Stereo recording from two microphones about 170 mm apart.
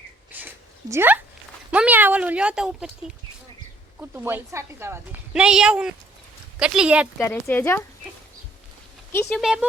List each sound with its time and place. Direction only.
0.3 s a sound: 10° right (ahead or behind)
1.7 s speech: 10° right (ahead or behind)
4.1 s speech: 10° right (ahead or behind)
5.3 s speech: 5° right (ahead or behind)
7.2 s speech: 15° left (ahead or behind)
9.4 s speech: 5° right (ahead or behind)